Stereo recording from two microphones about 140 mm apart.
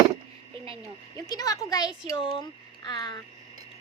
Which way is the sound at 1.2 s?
25° left (ahead or behind).